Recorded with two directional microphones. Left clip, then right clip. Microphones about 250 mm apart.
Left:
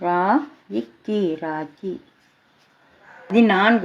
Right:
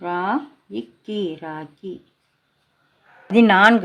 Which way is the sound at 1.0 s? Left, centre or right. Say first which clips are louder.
Left 3 dB; centre.